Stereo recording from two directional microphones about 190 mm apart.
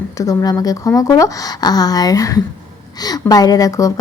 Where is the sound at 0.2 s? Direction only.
20° left (ahead or behind).